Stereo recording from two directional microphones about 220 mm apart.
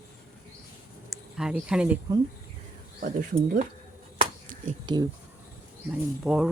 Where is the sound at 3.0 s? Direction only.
40° right (ahead or behind).